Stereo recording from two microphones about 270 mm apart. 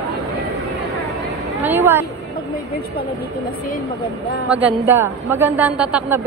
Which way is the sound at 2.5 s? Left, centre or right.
Left.